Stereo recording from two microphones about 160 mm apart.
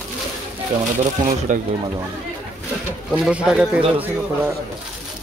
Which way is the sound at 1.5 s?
50° right (ahead or behind).